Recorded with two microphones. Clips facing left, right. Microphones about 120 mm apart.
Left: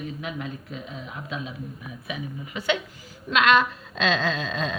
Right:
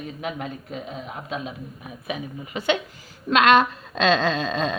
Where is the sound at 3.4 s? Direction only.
70° right (ahead or behind).